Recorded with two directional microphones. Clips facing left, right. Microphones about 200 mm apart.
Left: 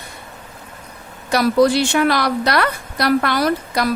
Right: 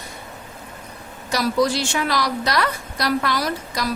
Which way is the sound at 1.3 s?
60° left (ahead or behind).